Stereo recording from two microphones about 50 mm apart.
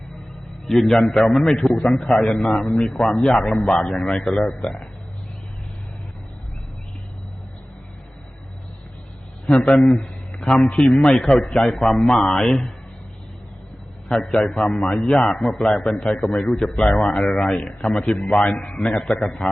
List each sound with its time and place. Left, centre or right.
0.7 s a man's voice: centre
9.7 s a man's voice: centre
14.1 s a man's voice: centre